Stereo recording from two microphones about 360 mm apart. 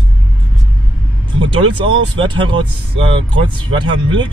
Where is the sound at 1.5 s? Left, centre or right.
Centre.